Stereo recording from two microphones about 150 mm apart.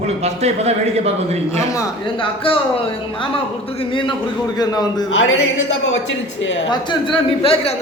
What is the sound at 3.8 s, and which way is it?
A man's voice, 35° left (ahead or behind).